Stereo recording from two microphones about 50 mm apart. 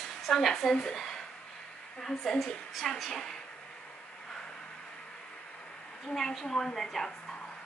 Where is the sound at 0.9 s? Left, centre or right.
Centre.